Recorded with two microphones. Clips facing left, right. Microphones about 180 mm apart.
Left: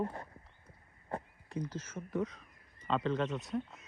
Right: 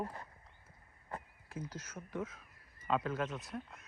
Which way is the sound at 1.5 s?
5° right (ahead or behind).